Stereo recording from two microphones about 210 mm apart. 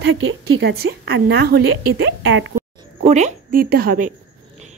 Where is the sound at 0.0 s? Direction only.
60° right (ahead or behind).